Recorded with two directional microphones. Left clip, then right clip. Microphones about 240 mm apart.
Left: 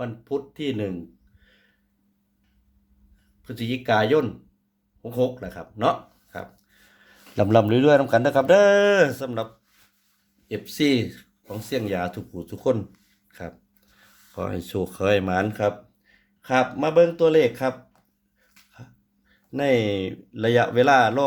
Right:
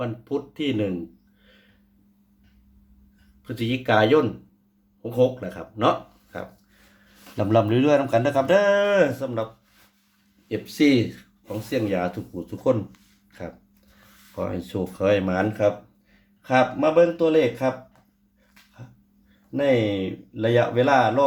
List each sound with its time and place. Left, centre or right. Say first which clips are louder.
0.0 s speech: right 1 dB; left
3.4 s speech: right 2 dB; left
7.3 s speech: left 2 dB; left
10.5 s speech: right 2 dB; left
13.3 s dog: right 1 dB; left
14.3 s speech: even; left
19.5 s speech: right 1 dB; left